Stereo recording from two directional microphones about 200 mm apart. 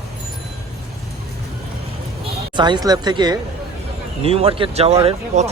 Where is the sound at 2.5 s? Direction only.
20° right (ahead or behind).